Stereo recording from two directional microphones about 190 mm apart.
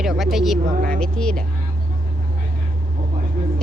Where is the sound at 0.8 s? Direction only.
45° right (ahead or behind).